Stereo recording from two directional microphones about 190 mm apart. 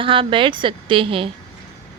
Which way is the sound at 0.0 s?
25° right (ahead or behind).